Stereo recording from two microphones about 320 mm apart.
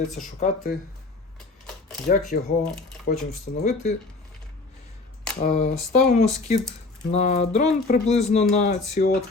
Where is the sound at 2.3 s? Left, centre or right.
Left.